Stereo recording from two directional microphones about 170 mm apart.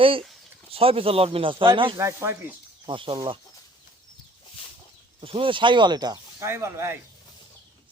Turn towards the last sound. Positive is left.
turn(degrees=-15)  # may be behind; listen again after turning